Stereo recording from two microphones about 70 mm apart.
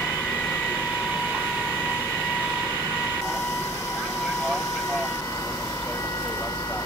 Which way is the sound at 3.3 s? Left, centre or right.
Left.